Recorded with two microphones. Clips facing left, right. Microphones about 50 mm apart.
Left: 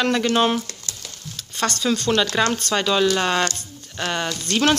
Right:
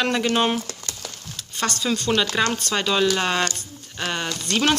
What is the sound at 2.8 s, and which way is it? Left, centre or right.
Speech, centre.